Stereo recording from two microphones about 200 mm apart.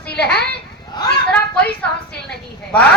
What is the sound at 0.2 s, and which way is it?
Speech, 5° left (ahead or behind).